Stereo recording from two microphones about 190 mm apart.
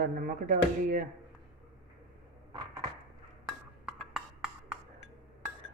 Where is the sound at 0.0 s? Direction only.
50° right (ahead or behind).